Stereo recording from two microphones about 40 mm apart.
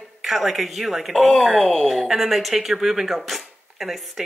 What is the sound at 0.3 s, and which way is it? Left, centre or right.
A woman's voice, centre.